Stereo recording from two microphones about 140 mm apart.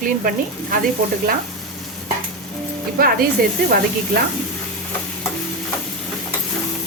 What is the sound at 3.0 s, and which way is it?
Speech, 90° right.